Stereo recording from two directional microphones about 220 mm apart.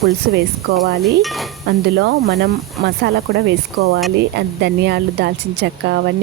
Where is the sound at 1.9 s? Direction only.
45° right (ahead or behind).